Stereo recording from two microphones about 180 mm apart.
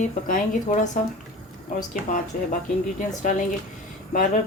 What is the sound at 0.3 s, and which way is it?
Speech, 45° left (ahead or behind).